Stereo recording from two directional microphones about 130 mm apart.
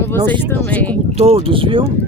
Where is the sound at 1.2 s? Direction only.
45° right (ahead or behind).